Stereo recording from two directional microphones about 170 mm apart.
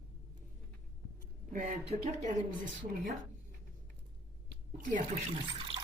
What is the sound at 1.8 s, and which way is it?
Speech, 40° right (ahead or behind).